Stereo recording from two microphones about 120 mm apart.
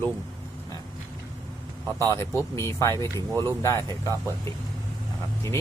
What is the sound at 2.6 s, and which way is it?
Speech, 25° left (ahead or behind).